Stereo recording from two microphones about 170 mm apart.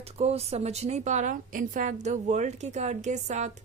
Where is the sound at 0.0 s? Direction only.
35° right (ahead or behind).